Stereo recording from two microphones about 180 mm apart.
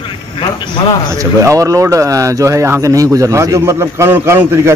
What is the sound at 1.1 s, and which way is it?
Speech, 15° right (ahead or behind).